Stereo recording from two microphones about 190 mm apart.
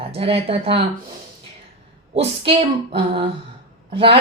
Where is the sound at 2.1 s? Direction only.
35° right (ahead or behind).